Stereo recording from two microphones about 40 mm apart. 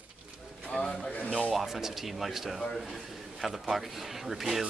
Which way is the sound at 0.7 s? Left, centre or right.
Left.